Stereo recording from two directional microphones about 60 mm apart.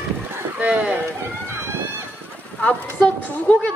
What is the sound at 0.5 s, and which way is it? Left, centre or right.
Speech, right.